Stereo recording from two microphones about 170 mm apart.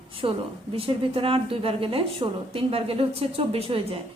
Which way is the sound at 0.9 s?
35° right (ahead or behind).